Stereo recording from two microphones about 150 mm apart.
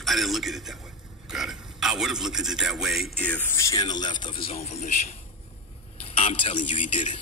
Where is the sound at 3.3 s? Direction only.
15° left (ahead or behind); by 4.4 s 30° left (ahead or behind).